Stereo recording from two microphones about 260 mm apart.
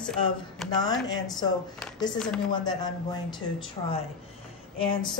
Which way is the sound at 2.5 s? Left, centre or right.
Centre.